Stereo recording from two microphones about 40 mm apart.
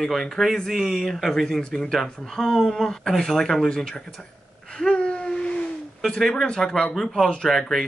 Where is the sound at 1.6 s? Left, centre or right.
Left.